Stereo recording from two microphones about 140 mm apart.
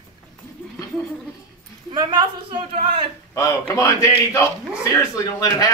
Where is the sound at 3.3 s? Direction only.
25° left (ahead or behind).